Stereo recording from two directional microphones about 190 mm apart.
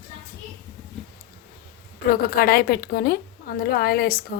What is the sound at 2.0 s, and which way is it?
A woman's voice, 50° left (ahead or behind).